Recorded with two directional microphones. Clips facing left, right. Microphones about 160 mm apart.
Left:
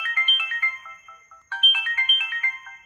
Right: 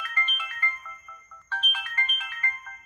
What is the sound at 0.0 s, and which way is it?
Ringtone, 10° left (ahead or behind).